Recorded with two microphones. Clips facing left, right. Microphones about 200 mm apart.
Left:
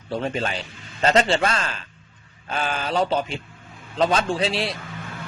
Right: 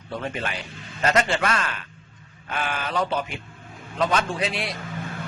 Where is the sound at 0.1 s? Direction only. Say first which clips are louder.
Left 4 dB; 30° left (ahead or behind).